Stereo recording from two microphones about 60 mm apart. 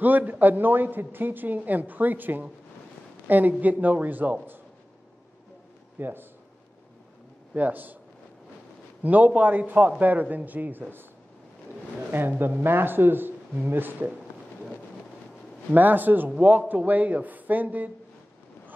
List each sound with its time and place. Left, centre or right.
0.0 s a man's voice: right
5.9 s speech: right
7.5 s speech: right
9.0 s a man's voice: right
12.1 s speech: right
15.7 s a man's voice: right